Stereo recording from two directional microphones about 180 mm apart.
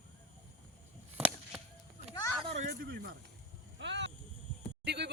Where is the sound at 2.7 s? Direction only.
60° right (ahead or behind).